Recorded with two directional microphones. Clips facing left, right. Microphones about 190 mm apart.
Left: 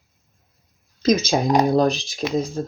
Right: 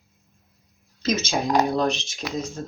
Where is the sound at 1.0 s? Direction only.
40° left (ahead or behind).